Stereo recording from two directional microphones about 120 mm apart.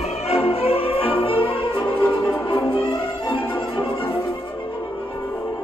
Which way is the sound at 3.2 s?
45° left (ahead or behind).